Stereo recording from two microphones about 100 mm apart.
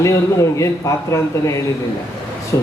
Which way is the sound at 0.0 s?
30° left (ahead or behind).